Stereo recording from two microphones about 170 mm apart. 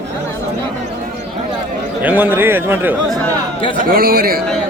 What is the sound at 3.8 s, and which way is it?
Speech, 60° right (ahead or behind).